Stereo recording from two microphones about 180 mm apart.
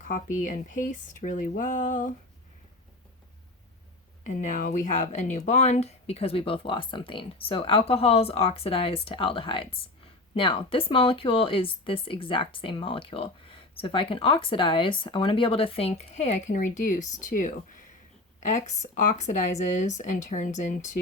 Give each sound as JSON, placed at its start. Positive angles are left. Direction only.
{"t": 0.0, "sound": "speech", "side_deg": 45}
{"t": 4.2, "sound": "speech", "side_deg": 45}